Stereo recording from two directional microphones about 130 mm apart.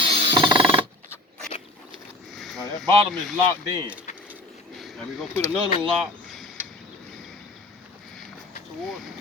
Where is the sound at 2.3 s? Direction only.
Centre (ahead or behind).